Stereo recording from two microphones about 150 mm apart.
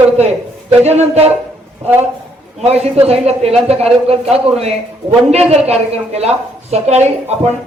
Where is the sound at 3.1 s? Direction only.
45° right (ahead or behind).